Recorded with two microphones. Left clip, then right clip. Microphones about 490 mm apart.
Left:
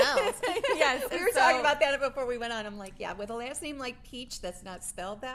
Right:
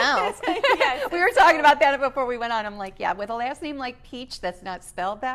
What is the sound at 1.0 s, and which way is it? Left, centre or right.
A woman's voice, centre.